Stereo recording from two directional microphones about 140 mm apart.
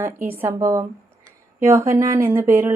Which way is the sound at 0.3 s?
15° right (ahead or behind).